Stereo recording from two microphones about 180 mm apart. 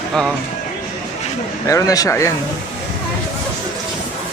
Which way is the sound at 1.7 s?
20° left (ahead or behind).